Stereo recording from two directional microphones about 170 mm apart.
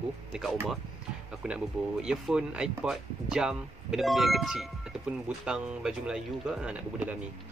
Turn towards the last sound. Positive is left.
turn(degrees=-10)  # may be behind; listen again after turning